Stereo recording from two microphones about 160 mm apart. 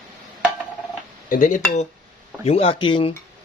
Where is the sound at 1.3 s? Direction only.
55° left (ahead or behind).